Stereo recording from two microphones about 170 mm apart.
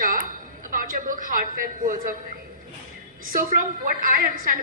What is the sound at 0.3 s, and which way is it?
A woman's voice, 55° right (ahead or behind).